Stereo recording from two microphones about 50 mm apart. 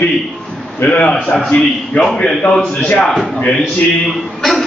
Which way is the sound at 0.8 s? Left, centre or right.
Left.